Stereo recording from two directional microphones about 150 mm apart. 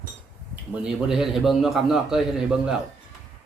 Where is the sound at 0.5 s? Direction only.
10° right (ahead or behind).